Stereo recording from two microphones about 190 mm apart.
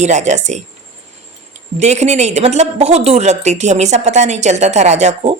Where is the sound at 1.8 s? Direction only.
35° right (ahead or behind).